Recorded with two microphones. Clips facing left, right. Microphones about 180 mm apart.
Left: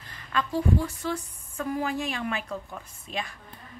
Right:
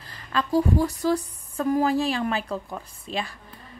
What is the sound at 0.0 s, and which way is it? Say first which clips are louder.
A woman's voice: right 2 dB; 35° right (ahead or behind).